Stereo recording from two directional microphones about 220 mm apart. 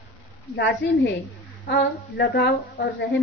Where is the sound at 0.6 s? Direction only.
55° left (ahead or behind).